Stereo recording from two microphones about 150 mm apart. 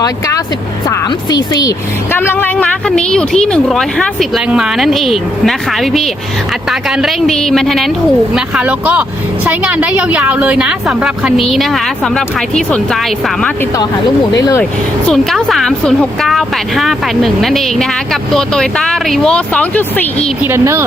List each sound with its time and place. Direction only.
0.0 s a woman's voice: 25° left (ahead or behind)
2.1 s a woman's voice: 15° left (ahead or behind)
14.3 s a woman's voice: 25° left (ahead or behind)
14.6 s speech: 5° left (ahead or behind)
20.4 s a woman's voice: 15° right (ahead or behind)